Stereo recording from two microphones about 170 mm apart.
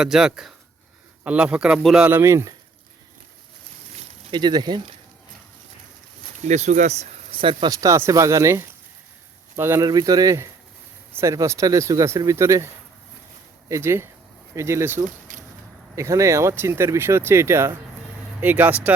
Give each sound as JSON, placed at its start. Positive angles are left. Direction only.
{"t": 0.0, "sound": "speech", "side_deg": -5}
{"t": 4.3, "sound": "speech", "side_deg": -25}
{"t": 6.4, "sound": "speech", "side_deg": -40}
{"t": 7.7, "sound": "speech", "side_deg": -20}
{"t": 13.7, "sound": "speech", "side_deg": -15}
{"t": 15.0, "sound": "a sound", "side_deg": -50}
{"t": 16.0, "sound": "speech", "side_deg": -15}